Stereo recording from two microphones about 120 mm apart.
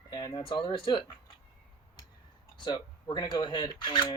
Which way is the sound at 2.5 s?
40° left (ahead or behind).